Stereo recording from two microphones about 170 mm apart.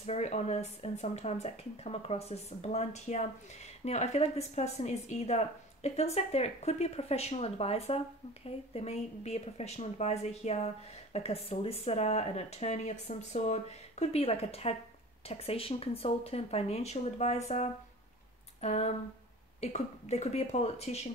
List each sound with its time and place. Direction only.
0.0 s a woman's voice: 40° left (ahead or behind)
18.6 s a woman's voice: 40° left (ahead or behind)